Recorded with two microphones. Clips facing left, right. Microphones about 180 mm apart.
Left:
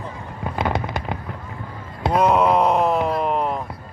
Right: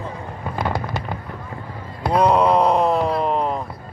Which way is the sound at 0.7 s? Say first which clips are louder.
Even; 15° left (ahead or behind).